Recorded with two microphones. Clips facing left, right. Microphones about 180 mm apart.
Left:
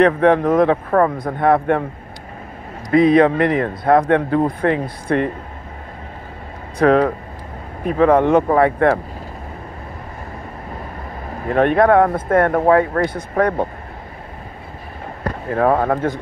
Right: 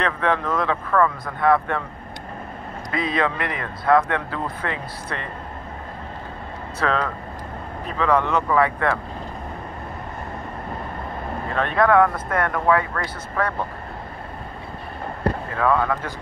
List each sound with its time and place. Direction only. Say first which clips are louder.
0.0 s speech: left 10 dB; 50° left (ahead or behind)
0.8 s speech: left 4 dB; 35° left (ahead or behind)
1.2 s speech: left 4 dB; 50° left (ahead or behind)
2.9 s speech: left 12 dB; 50° left (ahead or behind)
6.9 s speech: left 10 dB; 45° left (ahead or behind)
11.5 s speech: left 5 dB; 55° left (ahead or behind)
12.1 s speech: left 8 dB; 30° left (ahead or behind)
15.5 s speech: left 7 dB; 40° left (ahead or behind)